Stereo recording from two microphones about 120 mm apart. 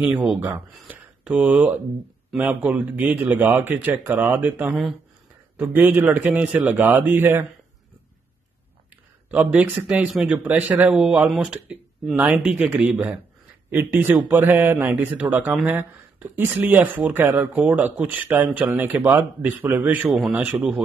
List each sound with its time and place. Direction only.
0.0 s speech: 10° right (ahead or behind)
9.3 s speech: 15° right (ahead or behind)